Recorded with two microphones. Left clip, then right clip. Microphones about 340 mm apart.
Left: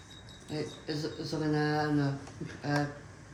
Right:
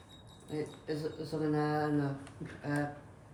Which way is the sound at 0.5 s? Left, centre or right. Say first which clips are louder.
Left 1 dB; centre.